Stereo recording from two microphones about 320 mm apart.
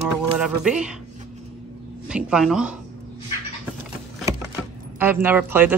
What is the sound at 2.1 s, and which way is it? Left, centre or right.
Speech, centre.